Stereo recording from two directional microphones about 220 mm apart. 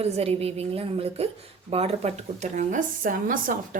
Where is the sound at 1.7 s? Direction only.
30° right (ahead or behind).